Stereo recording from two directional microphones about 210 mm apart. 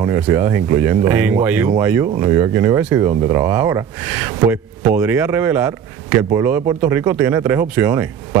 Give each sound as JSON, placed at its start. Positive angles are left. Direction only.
{"t": 0.0, "sound": "speech", "side_deg": -15}